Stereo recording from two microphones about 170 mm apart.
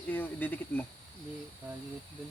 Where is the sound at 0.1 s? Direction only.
10° left (ahead or behind).